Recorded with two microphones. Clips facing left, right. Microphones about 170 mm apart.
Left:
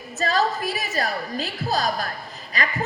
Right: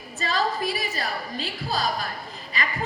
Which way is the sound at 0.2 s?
45° left (ahead or behind).